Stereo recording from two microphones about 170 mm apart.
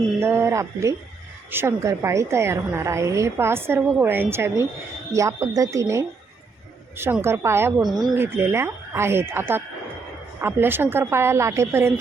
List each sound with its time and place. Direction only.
0.2 s a woman's voice: 15° right (ahead or behind)
7.8 s speech: centre (ahead or behind)
8.1 s a woman's voice: 15° right (ahead or behind)